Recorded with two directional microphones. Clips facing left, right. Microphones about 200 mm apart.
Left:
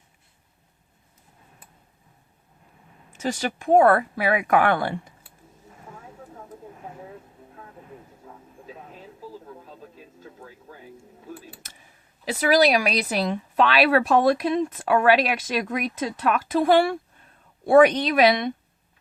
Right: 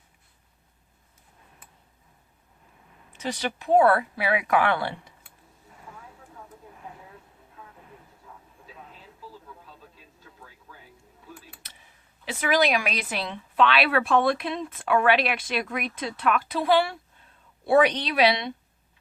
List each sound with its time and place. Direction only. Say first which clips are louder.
3.1 s speech: left 3 dB; 45° left (ahead or behind)
11.3 s a sound: left 7 dB; 40° left (ahead or behind)
12.2 s speech: left 5 dB; 40° left (ahead or behind)